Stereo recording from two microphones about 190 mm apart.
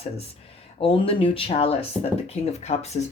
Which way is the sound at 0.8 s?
25° left (ahead or behind).